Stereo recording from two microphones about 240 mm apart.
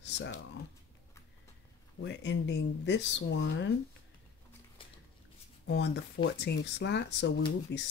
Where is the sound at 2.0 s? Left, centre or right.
Left.